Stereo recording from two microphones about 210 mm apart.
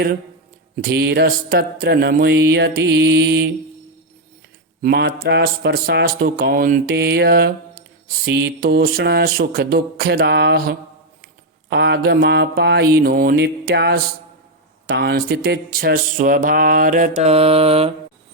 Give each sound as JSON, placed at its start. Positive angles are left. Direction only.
{"t": 0.8, "sound": "speech", "side_deg": -50}
{"t": 4.8, "sound": "speech", "side_deg": -45}